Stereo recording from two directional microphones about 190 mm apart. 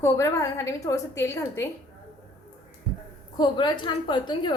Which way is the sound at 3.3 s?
25° left (ahead or behind).